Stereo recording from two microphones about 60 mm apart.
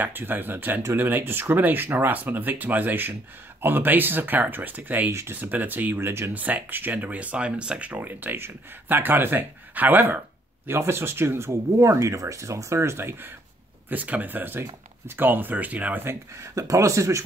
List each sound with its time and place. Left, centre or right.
0.0 s speech: right
6.3 s speech: right
8.1 s speech: right
10.7 s speech: right
13.8 s speech: right
16.3 s speech: right